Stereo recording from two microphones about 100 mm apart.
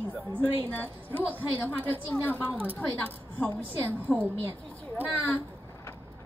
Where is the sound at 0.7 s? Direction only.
15° left (ahead or behind).